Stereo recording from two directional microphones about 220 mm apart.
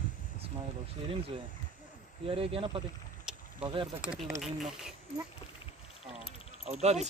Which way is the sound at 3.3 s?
5° right (ahead or behind).